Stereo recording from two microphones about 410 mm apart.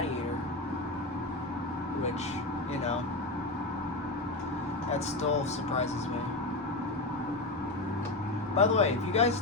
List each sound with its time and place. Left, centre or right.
5.3 s speech: centre
8.5 s speech: centre